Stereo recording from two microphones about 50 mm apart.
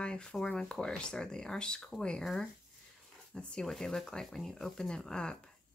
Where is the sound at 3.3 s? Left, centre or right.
Centre.